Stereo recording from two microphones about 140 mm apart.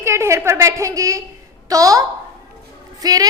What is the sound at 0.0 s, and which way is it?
A woman's voice, 20° right (ahead or behind).